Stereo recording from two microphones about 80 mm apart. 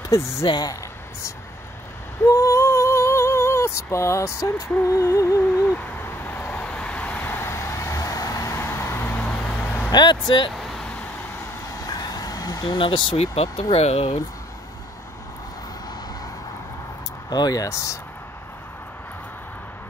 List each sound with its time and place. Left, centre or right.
0.5 s speech: left
2.2 s female singing: left
5.7 s a sound: left
7.2 s vehicle: left
8.5 s vehicle: left; by 9.8 s centre
9.8 s speech: left
10.5 s vehicle: centre
11.6 s fowl: left
12.6 s speech: left
17.3 s speech: left